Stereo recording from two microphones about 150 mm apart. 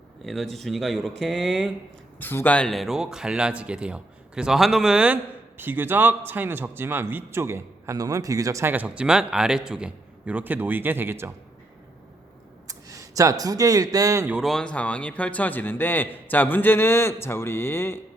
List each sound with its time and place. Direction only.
0.3 s speech: centre (ahead or behind)
2.1 s speech: 15° left (ahead or behind); by 11.3 s 15° right (ahead or behind)
12.6 s speech: 20° right (ahead or behind)
14.3 s a man's voice: centre (ahead or behind)